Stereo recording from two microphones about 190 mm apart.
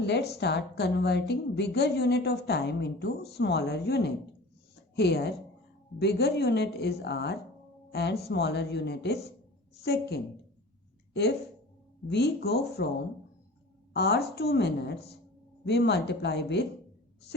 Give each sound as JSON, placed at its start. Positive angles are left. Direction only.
{"t": 0.0, "sound": "a woman's voice", "side_deg": 60}
{"t": 13.9, "sound": "a woman's voice", "side_deg": 60}